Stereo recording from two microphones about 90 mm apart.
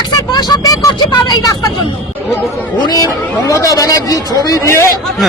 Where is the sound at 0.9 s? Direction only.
50° left (ahead or behind).